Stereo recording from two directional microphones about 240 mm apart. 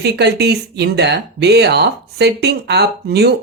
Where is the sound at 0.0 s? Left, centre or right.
Right.